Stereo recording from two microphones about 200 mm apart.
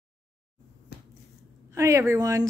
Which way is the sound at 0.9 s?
50° left (ahead or behind).